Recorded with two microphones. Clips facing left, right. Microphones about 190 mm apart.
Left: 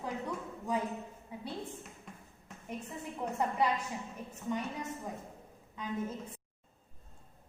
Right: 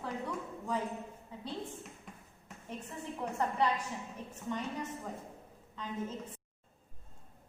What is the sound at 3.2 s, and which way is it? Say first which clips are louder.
A woman's voice: left 1 dB; 10° left (ahead or behind).